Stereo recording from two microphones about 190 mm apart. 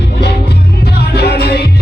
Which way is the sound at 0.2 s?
60° left (ahead or behind).